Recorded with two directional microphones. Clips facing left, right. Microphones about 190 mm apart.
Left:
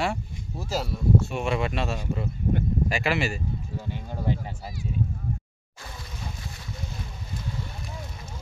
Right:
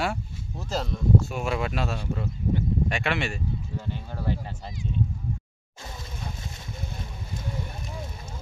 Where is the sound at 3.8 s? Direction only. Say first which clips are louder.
Left 2 dB; 15° left (ahead or behind).